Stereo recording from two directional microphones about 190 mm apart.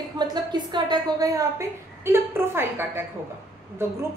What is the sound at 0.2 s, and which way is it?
A woman's voice, 20° right (ahead or behind).